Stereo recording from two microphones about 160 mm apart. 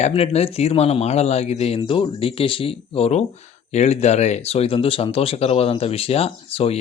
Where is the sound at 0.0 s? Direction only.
40° left (ahead or behind).